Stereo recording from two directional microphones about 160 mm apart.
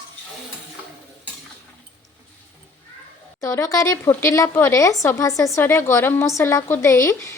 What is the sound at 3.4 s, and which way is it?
A woman's voice, 20° left (ahead or behind).